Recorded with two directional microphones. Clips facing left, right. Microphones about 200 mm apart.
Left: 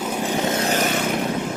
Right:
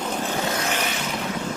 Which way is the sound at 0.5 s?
35° left (ahead or behind).